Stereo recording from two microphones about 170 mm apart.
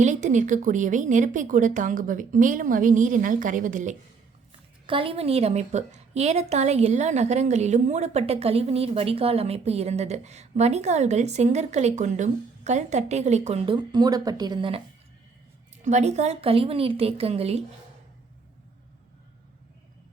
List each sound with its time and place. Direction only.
0.0 s speech: 45° right (ahead or behind)
4.9 s a woman's voice: 30° right (ahead or behind)
15.8 s a woman's voice: 45° right (ahead or behind)